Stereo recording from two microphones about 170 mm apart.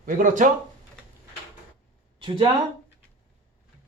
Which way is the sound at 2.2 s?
30° right (ahead or behind).